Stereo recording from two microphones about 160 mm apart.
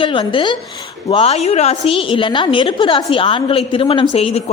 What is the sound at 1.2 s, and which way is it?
A woman's voice, 40° left (ahead or behind).